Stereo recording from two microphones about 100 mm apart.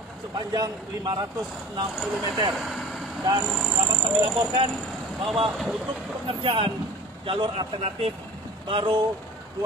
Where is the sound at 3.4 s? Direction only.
Centre (ahead or behind).